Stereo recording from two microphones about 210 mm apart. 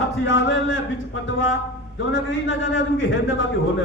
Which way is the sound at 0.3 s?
60° left (ahead or behind).